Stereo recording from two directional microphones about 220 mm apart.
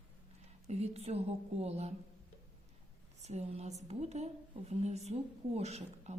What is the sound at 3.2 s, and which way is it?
A woman's voice, 30° right (ahead or behind).